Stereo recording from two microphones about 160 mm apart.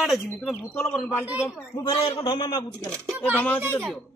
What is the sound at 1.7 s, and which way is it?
Speech, 30° left (ahead or behind).